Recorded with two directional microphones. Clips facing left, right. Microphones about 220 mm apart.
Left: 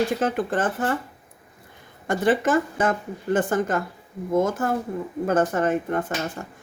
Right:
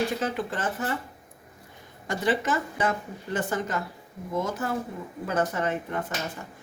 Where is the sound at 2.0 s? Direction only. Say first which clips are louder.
Left 5 dB; 50° left (ahead or behind).